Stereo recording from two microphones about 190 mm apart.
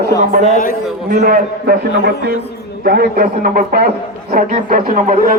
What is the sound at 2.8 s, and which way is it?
Speech, 55° right (ahead or behind).